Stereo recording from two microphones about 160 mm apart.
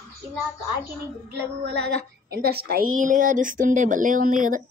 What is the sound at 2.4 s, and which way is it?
Speech, 75° right (ahead or behind).